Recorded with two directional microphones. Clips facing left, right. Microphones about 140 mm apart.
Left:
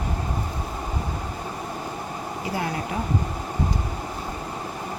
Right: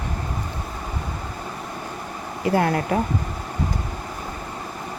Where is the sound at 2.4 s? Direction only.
60° right (ahead or behind).